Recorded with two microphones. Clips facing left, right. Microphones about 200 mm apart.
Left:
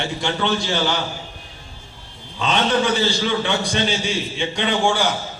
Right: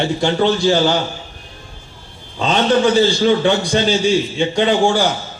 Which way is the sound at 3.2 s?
35° right (ahead or behind).